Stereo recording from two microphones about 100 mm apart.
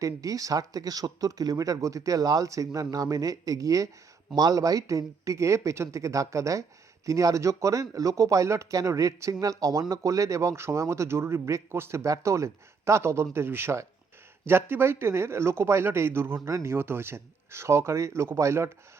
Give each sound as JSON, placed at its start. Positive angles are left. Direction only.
{"t": 0.0, "sound": "speech", "side_deg": -35}